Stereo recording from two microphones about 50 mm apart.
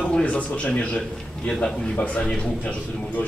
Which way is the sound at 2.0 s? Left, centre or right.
Left.